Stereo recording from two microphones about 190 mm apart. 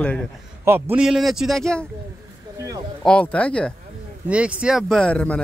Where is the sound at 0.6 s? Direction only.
10° right (ahead or behind).